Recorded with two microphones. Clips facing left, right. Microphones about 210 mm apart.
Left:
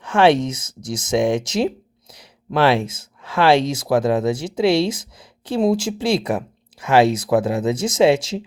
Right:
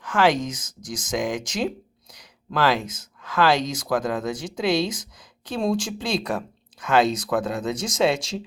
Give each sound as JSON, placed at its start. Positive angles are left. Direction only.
{"t": 0.0, "sound": "speech", "side_deg": 25}
{"t": 0.6, "sound": "speech", "side_deg": 10}
{"t": 0.9, "sound": "speech", "side_deg": 25}